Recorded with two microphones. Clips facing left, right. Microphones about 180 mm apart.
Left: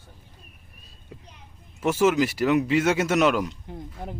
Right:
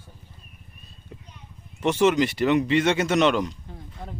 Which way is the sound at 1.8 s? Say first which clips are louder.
Right 1 dB; 5° left (ahead or behind).